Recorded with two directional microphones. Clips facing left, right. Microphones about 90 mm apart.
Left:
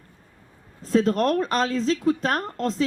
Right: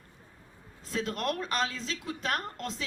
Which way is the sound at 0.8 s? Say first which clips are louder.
Left 13 dB; 40° left (ahead or behind).